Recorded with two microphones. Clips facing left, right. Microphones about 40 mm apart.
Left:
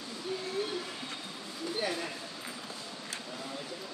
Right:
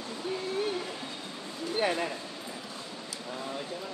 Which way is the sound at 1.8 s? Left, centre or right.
Right.